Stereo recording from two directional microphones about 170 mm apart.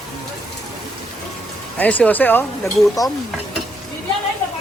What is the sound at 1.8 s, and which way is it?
Speech, 10° left (ahead or behind).